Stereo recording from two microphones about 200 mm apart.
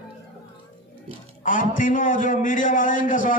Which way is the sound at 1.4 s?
40° left (ahead or behind).